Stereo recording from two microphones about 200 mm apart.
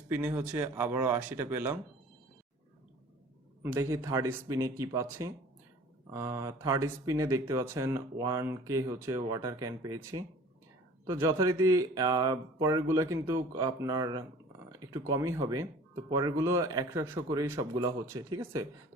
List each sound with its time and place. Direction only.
0.1 s speech: 10° right (ahead or behind)
3.6 s speech: 10° right (ahead or behind)
14.7 s a sound: 15° right (ahead or behind)
15.1 s speech: 15° right (ahead or behind)